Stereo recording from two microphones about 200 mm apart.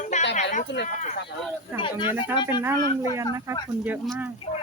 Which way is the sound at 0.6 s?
60° left (ahead or behind).